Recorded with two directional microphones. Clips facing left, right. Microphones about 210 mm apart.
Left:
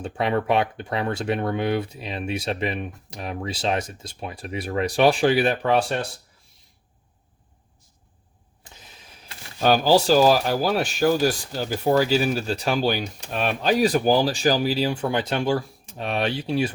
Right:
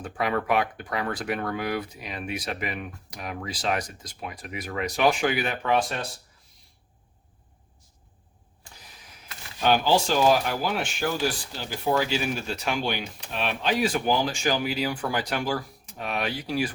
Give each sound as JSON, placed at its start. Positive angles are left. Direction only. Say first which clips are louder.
{"t": 0.0, "sound": "speech", "louder": "left 4 dB", "side_deg": 25}
{"t": 9.6, "sound": "speech", "louder": "left 4 dB", "side_deg": 40}